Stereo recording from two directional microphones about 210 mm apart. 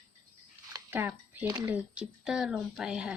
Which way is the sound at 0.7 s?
10° right (ahead or behind).